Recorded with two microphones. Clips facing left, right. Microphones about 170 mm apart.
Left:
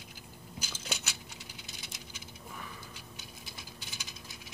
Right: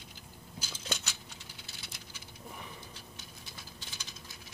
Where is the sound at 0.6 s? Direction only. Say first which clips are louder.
Right 1 dB; 10° left (ahead or behind).